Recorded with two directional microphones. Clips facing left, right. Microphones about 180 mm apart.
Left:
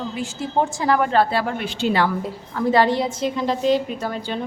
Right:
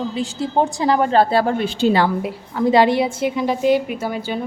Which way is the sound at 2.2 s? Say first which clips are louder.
Right 3 dB; 15° right (ahead or behind).